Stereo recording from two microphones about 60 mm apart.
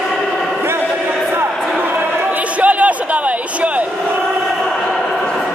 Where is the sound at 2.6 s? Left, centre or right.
Right.